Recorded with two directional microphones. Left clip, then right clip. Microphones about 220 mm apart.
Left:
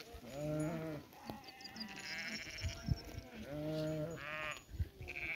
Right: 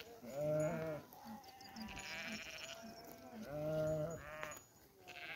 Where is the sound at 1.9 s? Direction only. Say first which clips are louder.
Left 2 dB; 35° right (ahead or behind).